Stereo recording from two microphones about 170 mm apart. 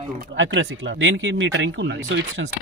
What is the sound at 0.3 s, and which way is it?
Speech, 90° right.